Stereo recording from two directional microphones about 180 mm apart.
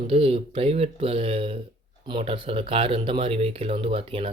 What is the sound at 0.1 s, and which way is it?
Speech, 30° right (ahead or behind).